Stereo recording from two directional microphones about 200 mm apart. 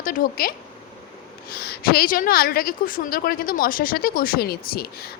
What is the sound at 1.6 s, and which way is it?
A woman's voice, 50° left (ahead or behind).